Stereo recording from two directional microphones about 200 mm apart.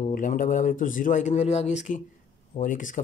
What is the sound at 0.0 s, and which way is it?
Speech, 40° left (ahead or behind).